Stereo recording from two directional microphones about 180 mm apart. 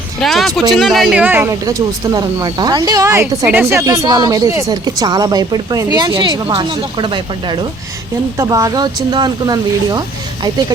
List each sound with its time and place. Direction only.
0.2 s speech: centre (ahead or behind); by 10.0 s 20° right (ahead or behind)